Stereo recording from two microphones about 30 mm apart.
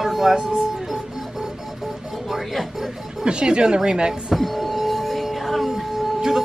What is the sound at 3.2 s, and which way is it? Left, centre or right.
Speech, right.